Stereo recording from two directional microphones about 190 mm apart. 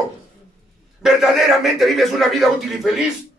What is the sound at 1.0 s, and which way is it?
Speech, centre (ahead or behind).